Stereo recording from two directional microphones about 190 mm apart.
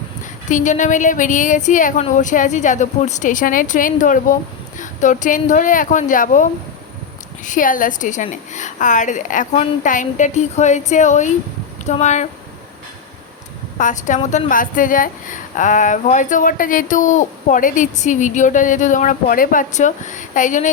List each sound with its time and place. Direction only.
0.5 s a woman's voice: 40° left (ahead or behind)
13.7 s a woman's voice: 40° left (ahead or behind)